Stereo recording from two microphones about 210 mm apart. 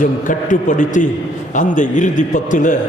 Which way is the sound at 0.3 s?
40° left (ahead or behind).